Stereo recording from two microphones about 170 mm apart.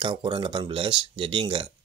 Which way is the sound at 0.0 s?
30° right (ahead or behind).